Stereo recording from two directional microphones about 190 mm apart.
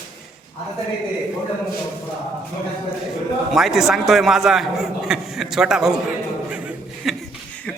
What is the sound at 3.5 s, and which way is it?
A man's voice, centre (ahead or behind).